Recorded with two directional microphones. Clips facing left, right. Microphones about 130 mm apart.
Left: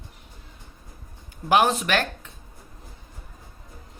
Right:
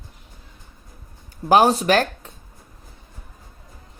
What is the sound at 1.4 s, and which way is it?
Speech, 35° right (ahead or behind).